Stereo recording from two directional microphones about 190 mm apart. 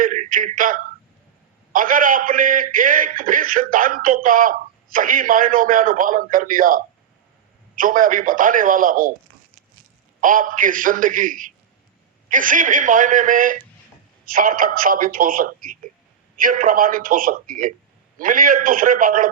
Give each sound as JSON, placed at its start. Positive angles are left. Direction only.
{"t": 0.0, "sound": "a man's voice", "side_deg": -45}
{"t": 10.2, "sound": "a man's voice", "side_deg": -45}